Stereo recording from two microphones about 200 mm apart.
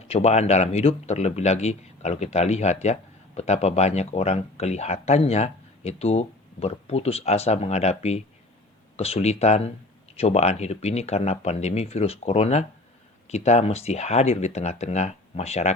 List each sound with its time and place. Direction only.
0.1 s speech: 35° left (ahead or behind)